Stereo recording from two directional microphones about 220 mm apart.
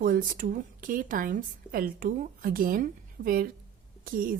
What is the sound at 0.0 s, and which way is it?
A woman's voice, 40° right (ahead or behind).